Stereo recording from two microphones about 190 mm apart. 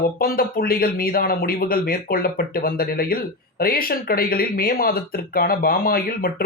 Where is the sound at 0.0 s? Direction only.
50° left (ahead or behind).